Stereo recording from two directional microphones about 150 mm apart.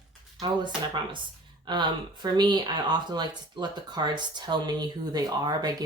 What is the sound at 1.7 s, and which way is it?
Speech, 30° right (ahead or behind).